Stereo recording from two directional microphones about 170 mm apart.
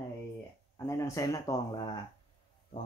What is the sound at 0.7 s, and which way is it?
Speech, 15° left (ahead or behind).